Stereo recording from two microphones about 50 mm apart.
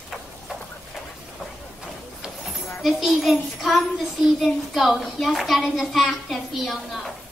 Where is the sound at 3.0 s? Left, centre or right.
Centre.